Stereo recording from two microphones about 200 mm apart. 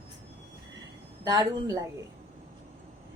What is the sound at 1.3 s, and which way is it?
Speech, 20° right (ahead or behind).